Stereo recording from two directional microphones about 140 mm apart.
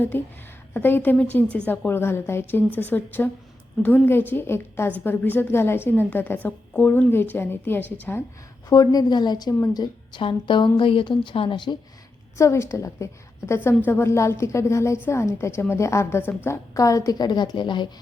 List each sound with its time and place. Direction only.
0.1 s a woman's voice: 15° left (ahead or behind)
8.7 s a woman's voice: 25° left (ahead or behind)
12.4 s a woman's voice: 20° left (ahead or behind)